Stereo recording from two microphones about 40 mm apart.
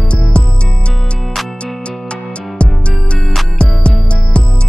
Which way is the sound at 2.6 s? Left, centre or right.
Left.